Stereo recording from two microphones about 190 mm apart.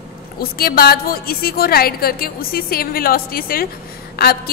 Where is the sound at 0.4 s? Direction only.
55° left (ahead or behind).